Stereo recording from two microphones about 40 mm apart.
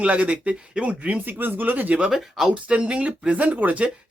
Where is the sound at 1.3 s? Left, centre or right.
Right.